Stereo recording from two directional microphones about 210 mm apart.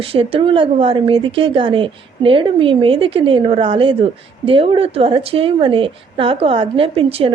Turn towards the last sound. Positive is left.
turn(degrees=-25)  # may be behind; listen again after turning